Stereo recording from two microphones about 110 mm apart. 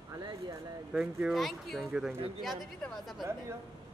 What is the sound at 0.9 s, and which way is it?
Speech, 5° right (ahead or behind).